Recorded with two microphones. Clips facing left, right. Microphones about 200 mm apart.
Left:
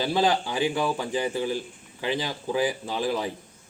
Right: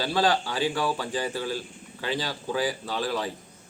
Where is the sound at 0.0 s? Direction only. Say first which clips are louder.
Left 1 dB; 20° left (ahead or behind).